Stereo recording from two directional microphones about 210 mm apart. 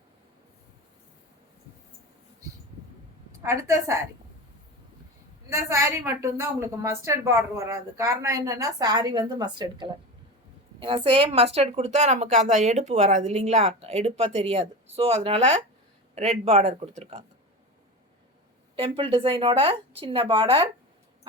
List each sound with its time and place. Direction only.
3.4 s a woman's voice: 15° right (ahead or behind)
5.5 s a woman's voice: 15° right (ahead or behind); by 17.2 s 30° right (ahead or behind)
18.8 s speech: 25° right (ahead or behind)